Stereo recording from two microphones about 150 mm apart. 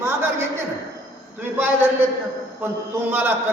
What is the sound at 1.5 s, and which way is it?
A man's voice, 15° right (ahead or behind).